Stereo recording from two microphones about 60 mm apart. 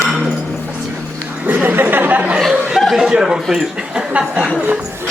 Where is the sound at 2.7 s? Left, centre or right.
Centre.